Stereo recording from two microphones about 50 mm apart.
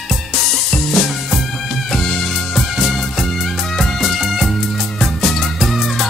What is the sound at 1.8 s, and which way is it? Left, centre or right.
Music, centre.